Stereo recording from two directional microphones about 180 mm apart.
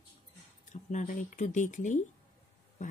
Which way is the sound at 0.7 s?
40° left (ahead or behind).